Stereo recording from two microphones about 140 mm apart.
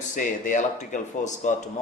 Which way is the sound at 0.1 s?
70° left (ahead or behind).